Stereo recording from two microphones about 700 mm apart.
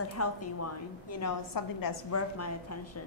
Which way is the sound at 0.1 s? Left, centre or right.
Left.